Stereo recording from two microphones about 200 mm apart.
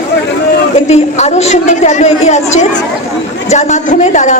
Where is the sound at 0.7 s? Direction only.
35° left (ahead or behind).